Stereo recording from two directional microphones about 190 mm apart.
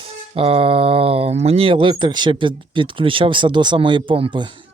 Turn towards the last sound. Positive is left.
turn(degrees=-25)  # may be behind; listen again after turning